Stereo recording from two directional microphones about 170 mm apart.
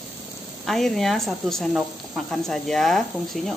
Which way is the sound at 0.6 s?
Centre (ahead or behind).